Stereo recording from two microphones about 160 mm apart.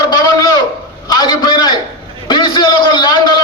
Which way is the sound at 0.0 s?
20° left (ahead or behind).